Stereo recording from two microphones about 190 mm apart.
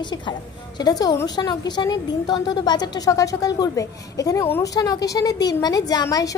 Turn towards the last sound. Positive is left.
turn(degrees=20)  # may be behind; listen again after turning